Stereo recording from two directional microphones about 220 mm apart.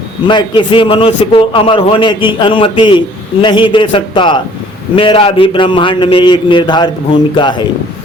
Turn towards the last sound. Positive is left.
turn(degrees=20)  # may be behind; listen again after turning